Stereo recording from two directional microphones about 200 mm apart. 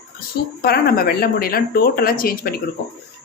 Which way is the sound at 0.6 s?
50° left (ahead or behind).